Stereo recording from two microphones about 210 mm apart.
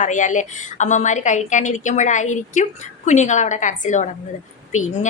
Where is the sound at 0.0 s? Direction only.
35° left (ahead or behind).